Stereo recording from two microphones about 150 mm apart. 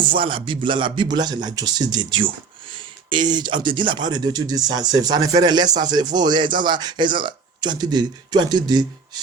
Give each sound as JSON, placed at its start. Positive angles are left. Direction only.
{"t": 0.0, "sound": "speech", "side_deg": -35}